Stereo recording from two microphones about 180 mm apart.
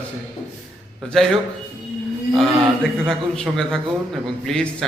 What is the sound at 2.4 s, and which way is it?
A man's voice, centre (ahead or behind).